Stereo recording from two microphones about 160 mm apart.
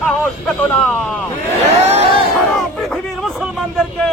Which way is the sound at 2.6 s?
Centre (ahead or behind).